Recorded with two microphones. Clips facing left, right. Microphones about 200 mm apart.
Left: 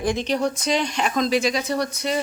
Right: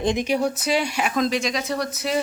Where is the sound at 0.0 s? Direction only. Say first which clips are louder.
Right 1 dB; 20° right (ahead or behind).